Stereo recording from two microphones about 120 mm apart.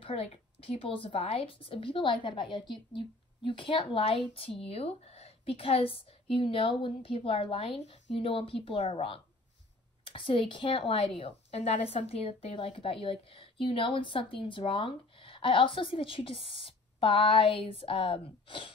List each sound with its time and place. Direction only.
0.0 s a woman's voice: 55° left (ahead or behind)
11.5 s a woman's voice: 65° left (ahead or behind); by 18.7 s 45° left (ahead or behind)